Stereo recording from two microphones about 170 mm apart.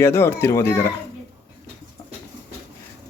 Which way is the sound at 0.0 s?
15° left (ahead or behind).